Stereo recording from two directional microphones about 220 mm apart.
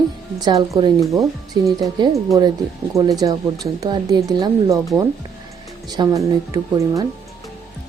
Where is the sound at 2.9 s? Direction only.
15° right (ahead or behind).